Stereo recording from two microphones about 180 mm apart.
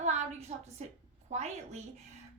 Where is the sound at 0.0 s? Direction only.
40° right (ahead or behind).